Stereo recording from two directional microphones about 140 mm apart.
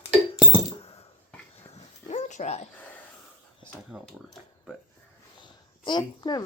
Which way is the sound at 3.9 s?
10° right (ahead or behind).